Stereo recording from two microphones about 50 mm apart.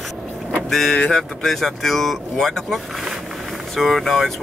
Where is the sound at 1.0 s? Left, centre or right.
Centre.